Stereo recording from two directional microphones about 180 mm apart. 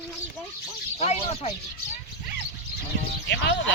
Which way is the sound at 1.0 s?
35° left (ahead or behind).